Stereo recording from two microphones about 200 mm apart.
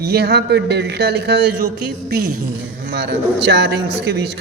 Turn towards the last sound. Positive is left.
turn(degrees=-55)  # may be behind; listen again after turning